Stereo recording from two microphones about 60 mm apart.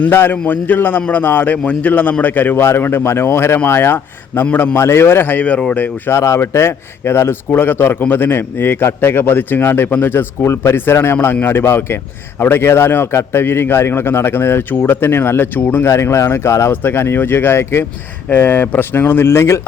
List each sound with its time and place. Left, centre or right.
0.0 s a man's voice: left
4.8 s a man's voice: left
6.1 s a man's voice: left
15.9 s speech: left
18.3 s a man's voice: left